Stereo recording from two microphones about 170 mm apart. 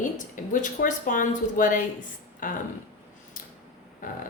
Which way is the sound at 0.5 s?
50° left (ahead or behind).